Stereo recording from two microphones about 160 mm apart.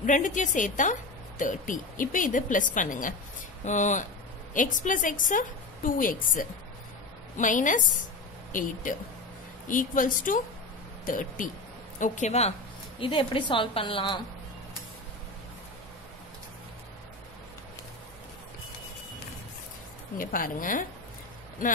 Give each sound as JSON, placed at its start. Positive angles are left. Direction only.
{"t": 0.0, "sound": "a woman's voice", "side_deg": 50}
{"t": 12.0, "sound": "a woman's voice", "side_deg": 45}
{"t": 20.2, "sound": "speech", "side_deg": 60}